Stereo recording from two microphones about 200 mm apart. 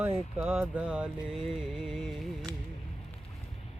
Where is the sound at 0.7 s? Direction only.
5° right (ahead or behind).